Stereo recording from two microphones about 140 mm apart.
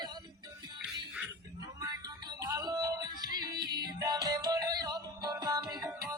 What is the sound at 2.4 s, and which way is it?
Music, 25° right (ahead or behind).